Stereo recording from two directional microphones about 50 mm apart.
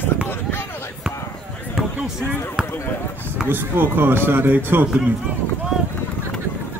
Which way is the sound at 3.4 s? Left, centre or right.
Right.